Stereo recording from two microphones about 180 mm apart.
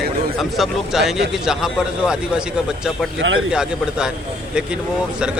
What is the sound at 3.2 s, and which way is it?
Speech, 90° right.